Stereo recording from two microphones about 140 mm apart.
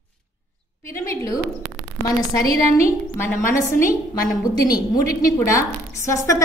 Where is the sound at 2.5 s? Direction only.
20° left (ahead or behind).